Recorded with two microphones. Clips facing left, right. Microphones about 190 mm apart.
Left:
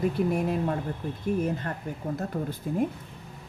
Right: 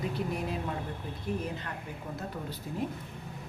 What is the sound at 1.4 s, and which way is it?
Speech, 45° left (ahead or behind).